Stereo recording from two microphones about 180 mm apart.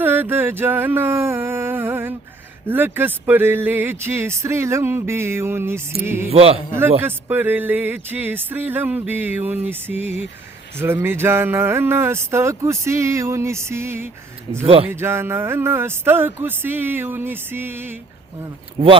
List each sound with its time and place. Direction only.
0.0 s a sound: 10° right (ahead or behind)
2.6 s speech: 10° right (ahead or behind)
6.3 s a man's voice: 35° right (ahead or behind)
7.0 s speech: 10° right (ahead or behind)
14.6 s a man's voice: 30° right (ahead or behind)
14.8 s speech: 15° right (ahead or behind)